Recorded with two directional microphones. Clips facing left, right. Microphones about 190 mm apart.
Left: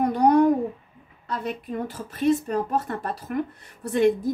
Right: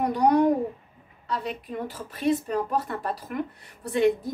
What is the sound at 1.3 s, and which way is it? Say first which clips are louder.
A woman's voice: left 2 dB; 50° left (ahead or behind).